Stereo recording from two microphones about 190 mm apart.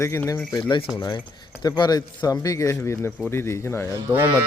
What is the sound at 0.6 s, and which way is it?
Speech, 25° left (ahead or behind).